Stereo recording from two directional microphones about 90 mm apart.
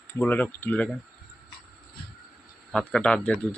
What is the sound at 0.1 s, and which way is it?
Speech, 20° left (ahead or behind).